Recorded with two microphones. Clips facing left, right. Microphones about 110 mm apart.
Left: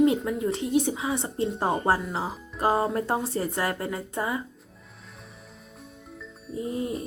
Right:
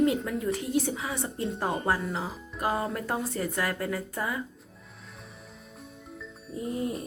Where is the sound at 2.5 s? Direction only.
30° left (ahead or behind).